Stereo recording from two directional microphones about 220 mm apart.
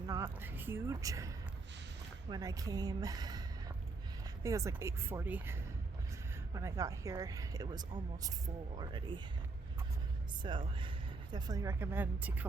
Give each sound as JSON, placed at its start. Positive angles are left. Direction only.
{"t": 0.1, "sound": "speech", "side_deg": -10}
{"t": 2.3, "sound": "speech", "side_deg": -15}
{"t": 4.4, "sound": "speech", "side_deg": -15}
{"t": 10.4, "sound": "speech", "side_deg": -20}